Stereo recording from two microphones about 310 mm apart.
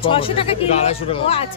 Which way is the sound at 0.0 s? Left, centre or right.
Centre.